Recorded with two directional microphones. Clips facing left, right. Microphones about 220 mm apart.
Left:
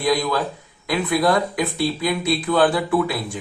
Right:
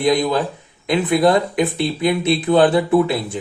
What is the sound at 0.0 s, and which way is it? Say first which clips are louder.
Speech: right 4 dB; 20° right (ahead or behind).